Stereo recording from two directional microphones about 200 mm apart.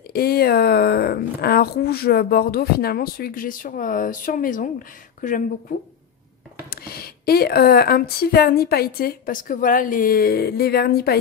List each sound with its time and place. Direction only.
0.1 s speech: 50° left (ahead or behind)
6.7 s speech: 50° left (ahead or behind)